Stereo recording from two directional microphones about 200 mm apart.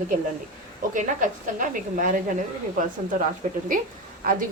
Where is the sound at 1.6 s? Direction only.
40° right (ahead or behind).